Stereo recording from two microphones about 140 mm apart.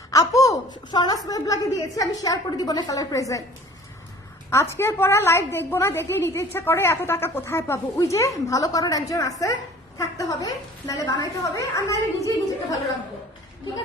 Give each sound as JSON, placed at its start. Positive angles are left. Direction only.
{"t": 0.1, "sound": "a sound", "side_deg": 25}
{"t": 0.9, "sound": "a woman's voice", "side_deg": 30}
{"t": 4.5, "sound": "a woman's voice", "side_deg": 20}